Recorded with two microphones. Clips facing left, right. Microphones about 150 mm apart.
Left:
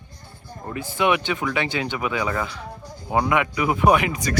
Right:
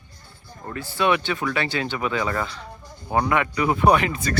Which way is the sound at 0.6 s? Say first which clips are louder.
Left 1 dB; 15° left (ahead or behind).